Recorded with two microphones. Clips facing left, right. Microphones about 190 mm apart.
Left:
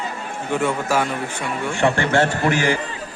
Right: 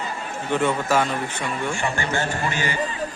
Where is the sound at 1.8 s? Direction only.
70° left (ahead or behind); by 2.7 s 85° left.